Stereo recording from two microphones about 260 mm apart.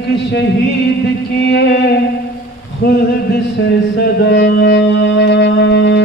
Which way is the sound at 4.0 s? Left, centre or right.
Left.